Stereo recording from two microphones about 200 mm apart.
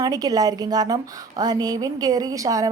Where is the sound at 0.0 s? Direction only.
20° right (ahead or behind).